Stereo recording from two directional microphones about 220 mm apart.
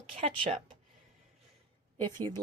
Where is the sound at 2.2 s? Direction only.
20° right (ahead or behind).